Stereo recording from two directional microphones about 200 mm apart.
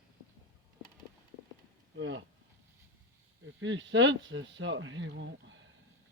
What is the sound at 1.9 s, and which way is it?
Speech, 70° right (ahead or behind).